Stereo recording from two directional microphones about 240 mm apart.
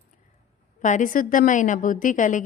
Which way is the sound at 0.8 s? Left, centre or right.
Left.